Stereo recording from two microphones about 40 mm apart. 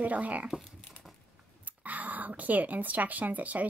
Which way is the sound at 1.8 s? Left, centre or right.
Right.